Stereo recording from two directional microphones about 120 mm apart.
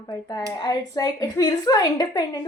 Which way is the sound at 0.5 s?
30° left (ahead or behind).